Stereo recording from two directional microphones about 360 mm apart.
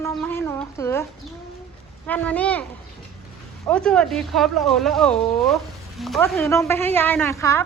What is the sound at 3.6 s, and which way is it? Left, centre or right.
Speech, centre.